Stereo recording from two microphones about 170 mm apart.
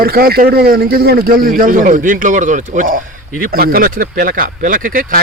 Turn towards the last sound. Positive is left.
turn(degrees=-55)  # may be behind; listen again after turning